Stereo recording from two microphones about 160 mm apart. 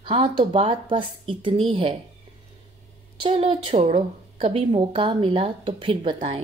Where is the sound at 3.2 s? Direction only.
35° right (ahead or behind).